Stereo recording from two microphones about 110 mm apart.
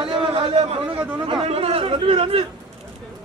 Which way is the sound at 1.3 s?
65° right (ahead or behind).